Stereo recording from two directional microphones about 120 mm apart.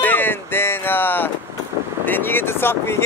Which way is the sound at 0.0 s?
15° left (ahead or behind).